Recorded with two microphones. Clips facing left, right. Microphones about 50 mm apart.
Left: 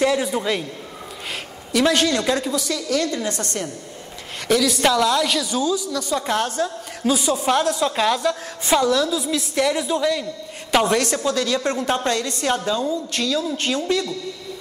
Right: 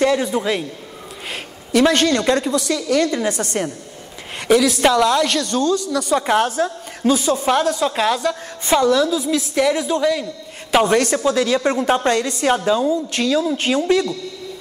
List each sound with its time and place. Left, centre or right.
0.0 s a woman's voice: centre
1.7 s a woman's voice: centre
2.7 s a woman's voice: centre
4.6 s a woman's voice: centre
6.1 s a woman's voice: centre
7.1 s a woman's voice: centre